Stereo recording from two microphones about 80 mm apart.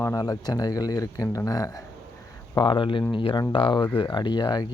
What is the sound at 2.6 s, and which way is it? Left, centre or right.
Speech, left.